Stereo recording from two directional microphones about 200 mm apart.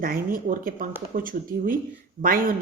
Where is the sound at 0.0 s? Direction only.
45° right (ahead or behind).